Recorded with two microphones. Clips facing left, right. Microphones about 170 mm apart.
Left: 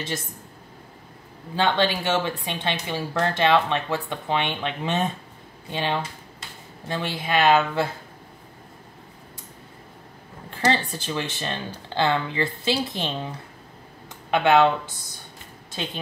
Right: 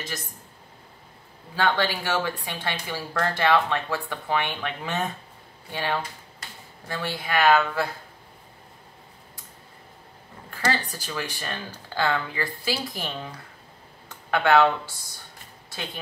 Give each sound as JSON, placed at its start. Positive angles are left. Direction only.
{"t": 1.5, "sound": "speech", "side_deg": 20}
{"t": 10.5, "sound": "speech", "side_deg": 25}
{"t": 14.3, "sound": "speech", "side_deg": 20}